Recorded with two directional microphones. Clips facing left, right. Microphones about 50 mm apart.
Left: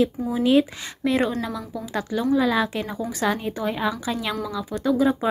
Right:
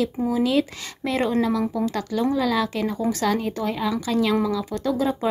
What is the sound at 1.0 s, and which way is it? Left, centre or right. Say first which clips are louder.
A woman's voice: even; centre.